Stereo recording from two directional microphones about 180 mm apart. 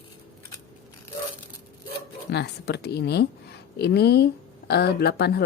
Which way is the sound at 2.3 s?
70° left (ahead or behind).